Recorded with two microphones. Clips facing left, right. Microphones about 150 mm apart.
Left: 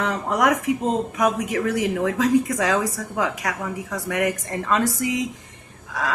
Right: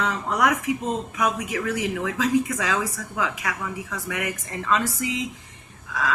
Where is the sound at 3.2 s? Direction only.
45° left (ahead or behind).